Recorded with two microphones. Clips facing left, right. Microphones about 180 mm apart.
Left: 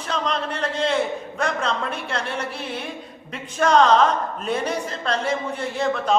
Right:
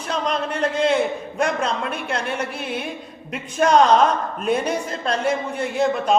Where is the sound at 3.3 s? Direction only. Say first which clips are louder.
Right 2 dB; 15° right (ahead or behind).